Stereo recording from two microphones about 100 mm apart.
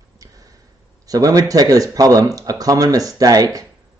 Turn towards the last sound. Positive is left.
turn(degrees=-35)  # may be behind; listen again after turning